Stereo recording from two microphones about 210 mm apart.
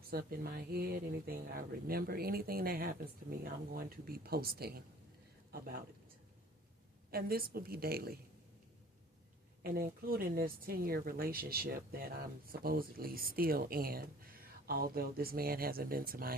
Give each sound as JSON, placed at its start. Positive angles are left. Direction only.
{"t": 0.1, "sound": "speech", "side_deg": -45}
{"t": 7.1, "sound": "speech", "side_deg": -45}
{"t": 9.6, "sound": "speech", "side_deg": -45}